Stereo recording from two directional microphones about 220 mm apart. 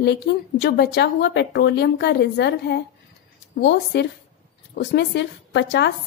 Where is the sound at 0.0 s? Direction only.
50° left (ahead or behind).